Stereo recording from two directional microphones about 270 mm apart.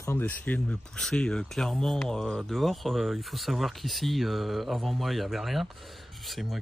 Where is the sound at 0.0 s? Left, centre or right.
Centre.